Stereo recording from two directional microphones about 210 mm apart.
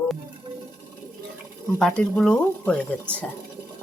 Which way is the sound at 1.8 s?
5° left (ahead or behind).